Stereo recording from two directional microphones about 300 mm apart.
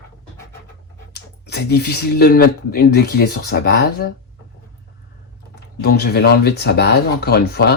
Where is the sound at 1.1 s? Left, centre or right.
Left.